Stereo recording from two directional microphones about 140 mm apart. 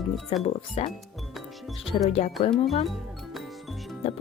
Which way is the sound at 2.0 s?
50° left (ahead or behind).